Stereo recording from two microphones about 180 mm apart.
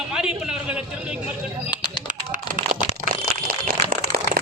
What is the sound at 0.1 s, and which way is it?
A man's voice, 5° right (ahead or behind).